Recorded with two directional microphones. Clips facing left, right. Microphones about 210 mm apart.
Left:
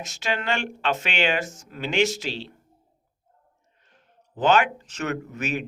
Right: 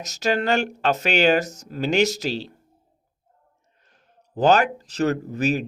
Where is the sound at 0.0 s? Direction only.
40° right (ahead or behind).